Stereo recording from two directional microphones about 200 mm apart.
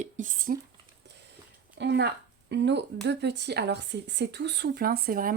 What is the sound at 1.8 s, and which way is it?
Speech, 60° right (ahead or behind).